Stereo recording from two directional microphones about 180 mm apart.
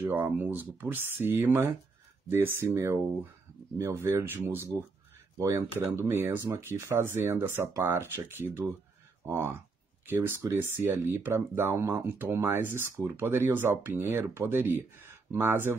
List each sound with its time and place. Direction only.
0.0 s speech: 10° right (ahead or behind)